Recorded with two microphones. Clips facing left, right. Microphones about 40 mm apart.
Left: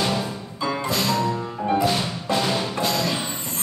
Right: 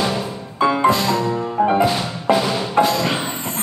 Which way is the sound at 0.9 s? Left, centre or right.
Right.